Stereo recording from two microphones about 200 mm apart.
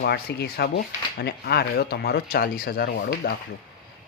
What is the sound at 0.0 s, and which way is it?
Speech, 55° left (ahead or behind).